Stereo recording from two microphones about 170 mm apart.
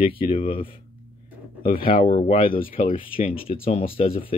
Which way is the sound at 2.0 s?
40° left (ahead or behind).